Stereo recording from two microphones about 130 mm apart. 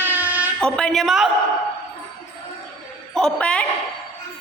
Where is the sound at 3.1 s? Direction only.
5° left (ahead or behind).